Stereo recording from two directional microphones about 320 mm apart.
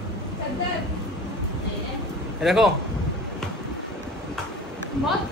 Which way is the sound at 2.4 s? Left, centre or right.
Centre.